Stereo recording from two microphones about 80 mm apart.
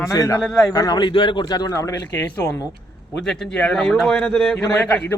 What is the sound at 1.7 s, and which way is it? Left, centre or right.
Speech, left.